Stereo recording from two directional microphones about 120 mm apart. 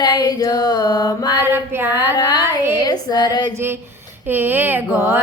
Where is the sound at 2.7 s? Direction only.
35° left (ahead or behind).